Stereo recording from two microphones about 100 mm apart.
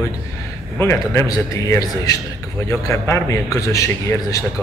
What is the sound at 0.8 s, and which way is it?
A man's voice, 25° left (ahead or behind).